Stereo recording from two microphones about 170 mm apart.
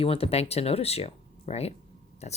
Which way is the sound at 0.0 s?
35° left (ahead or behind).